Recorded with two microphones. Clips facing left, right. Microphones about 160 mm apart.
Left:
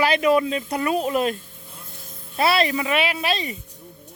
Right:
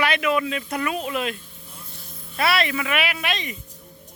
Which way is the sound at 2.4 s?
30° left (ahead or behind).